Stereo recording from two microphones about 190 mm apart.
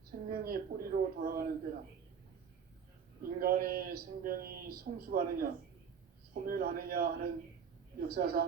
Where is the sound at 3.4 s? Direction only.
50° right (ahead or behind).